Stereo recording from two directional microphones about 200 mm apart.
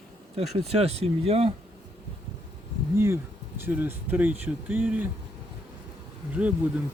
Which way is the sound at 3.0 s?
10° right (ahead or behind).